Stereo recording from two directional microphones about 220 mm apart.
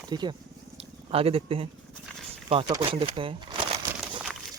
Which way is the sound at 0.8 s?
25° right (ahead or behind).